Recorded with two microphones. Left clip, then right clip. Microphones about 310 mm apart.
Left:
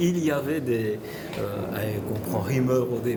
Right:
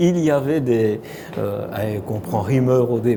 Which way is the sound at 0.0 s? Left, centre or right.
Right.